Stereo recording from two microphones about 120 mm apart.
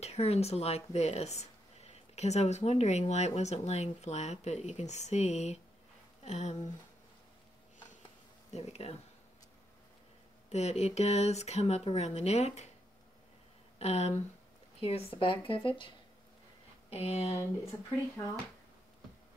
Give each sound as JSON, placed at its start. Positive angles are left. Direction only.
{"t": 0.0, "sound": "speech", "side_deg": 60}
{"t": 8.5, "sound": "speech", "side_deg": 60}
{"t": 10.5, "sound": "speech", "side_deg": 60}
{"t": 13.7, "sound": "speech", "side_deg": 65}
{"t": 16.9, "sound": "speech", "side_deg": 60}